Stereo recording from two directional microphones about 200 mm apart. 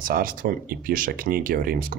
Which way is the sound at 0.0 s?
45° right (ahead or behind).